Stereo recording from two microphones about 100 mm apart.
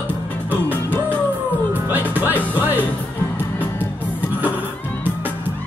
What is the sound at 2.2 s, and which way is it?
Music, 20° right (ahead or behind).